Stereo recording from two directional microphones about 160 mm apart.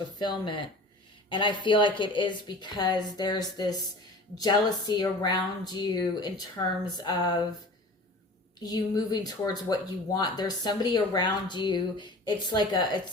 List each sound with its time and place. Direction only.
0.2 s speech: 30° left (ahead or behind)
8.6 s speech: 25° left (ahead or behind)